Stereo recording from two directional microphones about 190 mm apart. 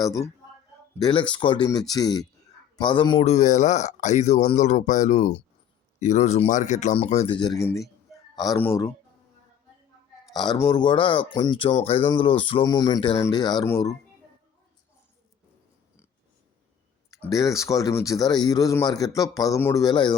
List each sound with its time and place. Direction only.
0.0 s speech: 15° left (ahead or behind)
8.4 s speech: 15° left (ahead or behind)
10.3 s speech: 20° left (ahead or behind)
17.1 s a sound: 15° left (ahead or behind)
17.6 s speech: 15° left (ahead or behind)